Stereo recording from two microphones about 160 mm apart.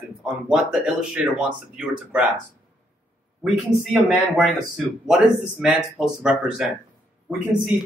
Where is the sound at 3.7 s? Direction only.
Centre (ahead or behind).